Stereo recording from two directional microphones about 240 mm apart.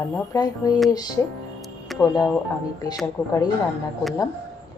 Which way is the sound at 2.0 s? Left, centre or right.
Centre.